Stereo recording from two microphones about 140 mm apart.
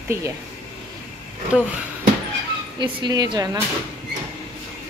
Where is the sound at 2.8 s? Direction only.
30° right (ahead or behind).